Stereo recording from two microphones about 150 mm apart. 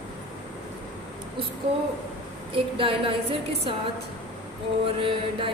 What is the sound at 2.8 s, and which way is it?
Speech, 35° right (ahead or behind).